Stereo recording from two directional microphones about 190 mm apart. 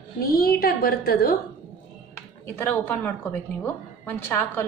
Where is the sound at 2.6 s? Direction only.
10° left (ahead or behind).